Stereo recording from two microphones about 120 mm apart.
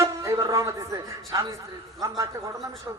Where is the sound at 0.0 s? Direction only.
25° right (ahead or behind).